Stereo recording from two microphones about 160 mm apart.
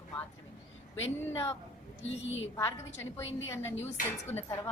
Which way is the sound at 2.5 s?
15° left (ahead or behind).